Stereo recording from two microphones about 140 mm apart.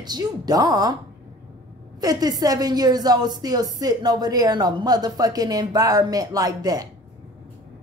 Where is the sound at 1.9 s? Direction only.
25° right (ahead or behind).